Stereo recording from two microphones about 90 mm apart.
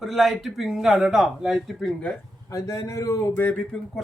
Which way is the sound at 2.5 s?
40° left (ahead or behind).